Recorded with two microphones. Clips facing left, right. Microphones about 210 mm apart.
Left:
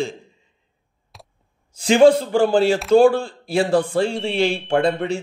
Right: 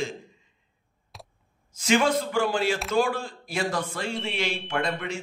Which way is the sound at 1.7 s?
30° left (ahead or behind).